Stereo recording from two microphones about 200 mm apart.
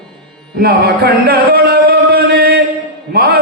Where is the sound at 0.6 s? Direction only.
50° right (ahead or behind).